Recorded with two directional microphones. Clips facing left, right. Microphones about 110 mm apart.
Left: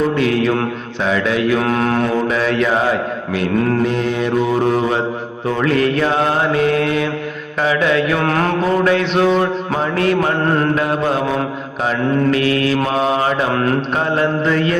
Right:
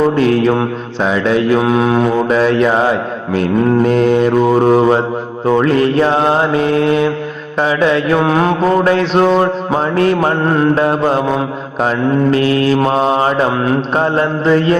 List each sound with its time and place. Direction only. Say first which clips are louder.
0.2 s mantra: right 4 dB; 35° right (ahead or behind)
1.6 s mantra: right 4 dB; 15° right (ahead or behind)
2.3 s mantra: right 5 dB; 30° right (ahead or behind)
3.8 s mantra: right 7 dB; 45° right (ahead or behind); by 8.2 s 30° right (ahead or behind)
8.2 s mantra: right 4 dB; 15° right (ahead or behind)
8.8 s mantra: right 3 dB; 40° right (ahead or behind)